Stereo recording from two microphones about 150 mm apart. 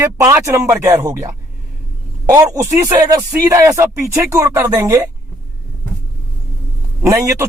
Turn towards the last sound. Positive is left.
turn(degrees=-20)  # may be behind; listen again after turning